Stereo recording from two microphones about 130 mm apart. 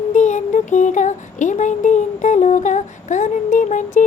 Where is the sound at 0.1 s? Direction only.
70° left (ahead or behind).